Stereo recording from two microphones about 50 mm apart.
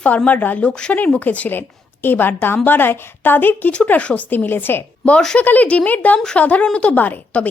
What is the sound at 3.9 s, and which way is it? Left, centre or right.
Speech, left.